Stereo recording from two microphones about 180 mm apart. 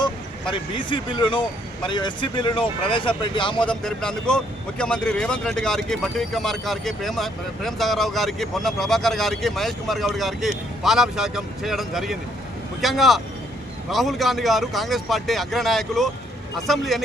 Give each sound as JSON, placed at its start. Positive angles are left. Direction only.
{"t": 0.5, "sound": "speech", "side_deg": 25}
{"t": 3.7, "sound": "speech", "side_deg": 5}